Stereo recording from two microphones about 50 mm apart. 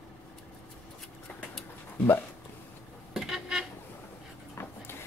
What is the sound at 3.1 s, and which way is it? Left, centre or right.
Vehicle, centre.